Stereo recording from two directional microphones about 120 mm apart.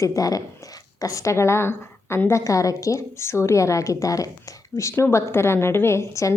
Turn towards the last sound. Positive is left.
turn(degrees=25)  # may be behind; listen again after turning